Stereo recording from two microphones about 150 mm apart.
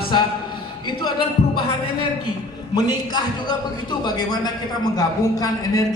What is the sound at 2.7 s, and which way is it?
A man's voice, 30° left (ahead or behind).